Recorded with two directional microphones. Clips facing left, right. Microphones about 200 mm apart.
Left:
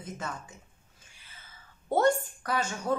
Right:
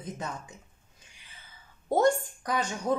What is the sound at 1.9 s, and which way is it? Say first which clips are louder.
Speech: right 1 dB; 15° right (ahead or behind).